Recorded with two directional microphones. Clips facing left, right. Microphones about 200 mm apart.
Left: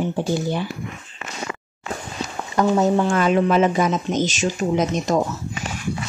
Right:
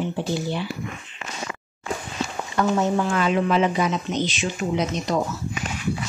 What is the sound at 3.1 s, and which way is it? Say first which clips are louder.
Speech: left 3 dB; 45° left (ahead or behind).